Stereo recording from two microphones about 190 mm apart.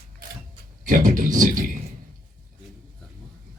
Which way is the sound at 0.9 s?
45° right (ahead or behind).